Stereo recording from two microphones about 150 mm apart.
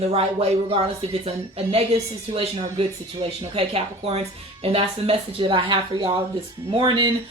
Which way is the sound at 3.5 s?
40° right (ahead or behind).